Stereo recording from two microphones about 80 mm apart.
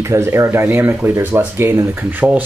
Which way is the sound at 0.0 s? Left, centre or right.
Right.